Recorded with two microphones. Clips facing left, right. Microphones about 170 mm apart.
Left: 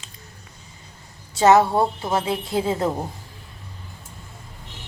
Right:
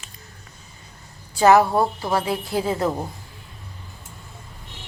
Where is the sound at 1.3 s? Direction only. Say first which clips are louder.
Even; 25° left (ahead or behind).